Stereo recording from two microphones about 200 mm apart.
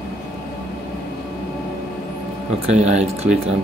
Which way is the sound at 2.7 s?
35° right (ahead or behind).